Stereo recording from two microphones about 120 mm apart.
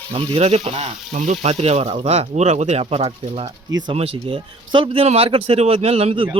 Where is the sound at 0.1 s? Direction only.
55° right (ahead or behind).